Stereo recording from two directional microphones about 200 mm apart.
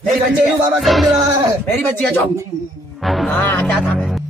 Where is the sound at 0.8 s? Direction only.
Centre (ahead or behind).